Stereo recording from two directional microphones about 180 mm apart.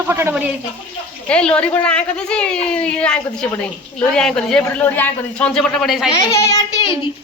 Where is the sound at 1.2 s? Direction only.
5° left (ahead or behind).